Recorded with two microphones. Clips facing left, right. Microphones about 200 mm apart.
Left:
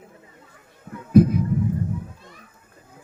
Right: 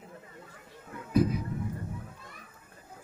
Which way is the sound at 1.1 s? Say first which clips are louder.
Left 10 dB; 55° left (ahead or behind).